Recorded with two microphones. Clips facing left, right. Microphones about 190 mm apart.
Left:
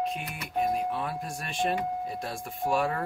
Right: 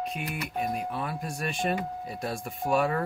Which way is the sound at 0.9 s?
Centre (ahead or behind).